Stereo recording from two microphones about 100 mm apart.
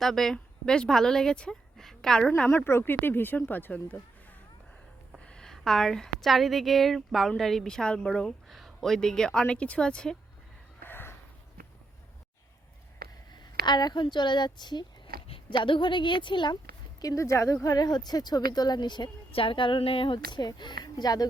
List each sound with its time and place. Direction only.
0.0 s a woman's voice: centre (ahead or behind)
2.5 s speech: 25° left (ahead or behind)
10.8 s a sound: 20° left (ahead or behind)
13.3 s speech: 45° left (ahead or behind)
17.0 s speech: 35° left (ahead or behind)
19.3 s a woman's voice: 60° left (ahead or behind); by 21.2 s 40° left (ahead or behind)